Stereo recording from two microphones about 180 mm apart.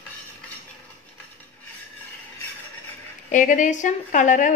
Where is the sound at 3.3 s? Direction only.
45° left (ahead or behind).